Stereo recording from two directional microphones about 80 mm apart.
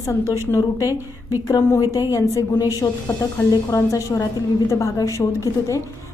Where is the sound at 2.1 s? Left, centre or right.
Left.